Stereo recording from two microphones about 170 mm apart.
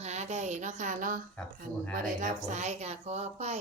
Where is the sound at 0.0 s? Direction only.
40° right (ahead or behind).